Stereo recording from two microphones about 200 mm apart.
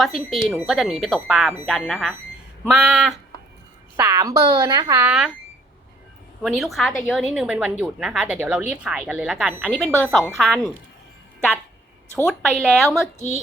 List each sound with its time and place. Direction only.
0.0 s a woman's voice: centre (ahead or behind)
3.9 s speech: 15° right (ahead or behind)
5.0 s a woman's voice: 5° right (ahead or behind)
6.4 s a woman's voice: centre (ahead or behind)
12.1 s a woman's voice: centre (ahead or behind)